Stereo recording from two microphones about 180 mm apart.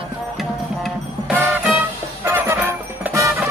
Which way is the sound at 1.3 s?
10° right (ahead or behind).